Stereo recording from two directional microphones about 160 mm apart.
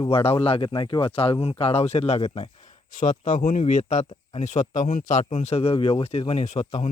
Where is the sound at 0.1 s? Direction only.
40° left (ahead or behind).